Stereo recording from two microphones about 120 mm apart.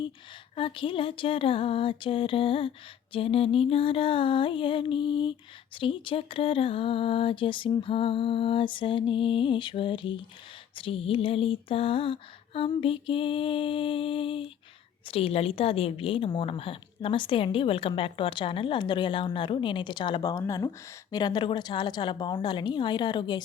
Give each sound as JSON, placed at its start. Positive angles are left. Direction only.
{"t": 0.5, "sound": "a woman's voice", "side_deg": 45}